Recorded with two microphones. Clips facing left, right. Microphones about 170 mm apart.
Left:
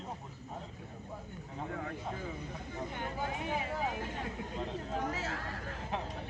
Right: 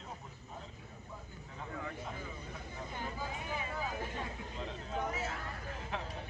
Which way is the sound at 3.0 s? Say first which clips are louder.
Left 3 dB; 70° left (ahead or behind).